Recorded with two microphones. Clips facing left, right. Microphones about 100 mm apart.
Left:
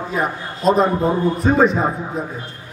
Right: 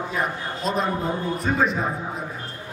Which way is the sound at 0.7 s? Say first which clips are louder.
Left 7 dB; 40° left (ahead or behind).